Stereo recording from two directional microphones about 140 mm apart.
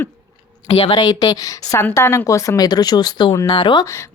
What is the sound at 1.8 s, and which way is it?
A woman's voice, 15° left (ahead or behind).